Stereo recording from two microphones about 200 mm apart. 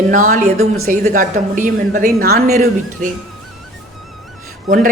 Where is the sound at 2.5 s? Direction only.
35° right (ahead or behind).